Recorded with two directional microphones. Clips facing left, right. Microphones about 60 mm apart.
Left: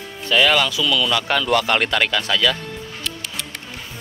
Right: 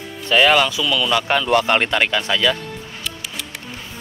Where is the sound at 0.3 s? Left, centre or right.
Right.